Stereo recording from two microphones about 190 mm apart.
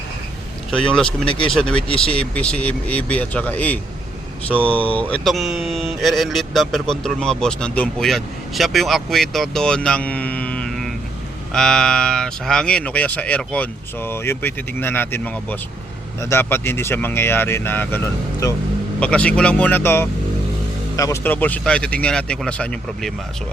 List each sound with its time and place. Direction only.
0.7 s speech: 5° left (ahead or behind)
1.3 s speech: 25° left (ahead or behind)
1.5 s speech: 5° left (ahead or behind)